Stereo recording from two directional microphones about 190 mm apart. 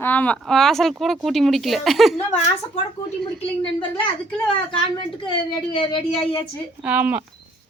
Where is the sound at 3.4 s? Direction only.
30° left (ahead or behind).